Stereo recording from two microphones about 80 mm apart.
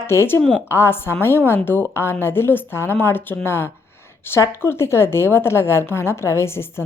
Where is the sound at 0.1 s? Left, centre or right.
Left.